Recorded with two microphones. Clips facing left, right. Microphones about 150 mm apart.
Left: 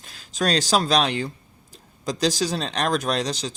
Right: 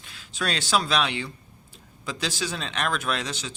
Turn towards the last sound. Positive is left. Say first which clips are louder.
# left 5 dB
turn(degrees=35)  # may be behind; listen again after turning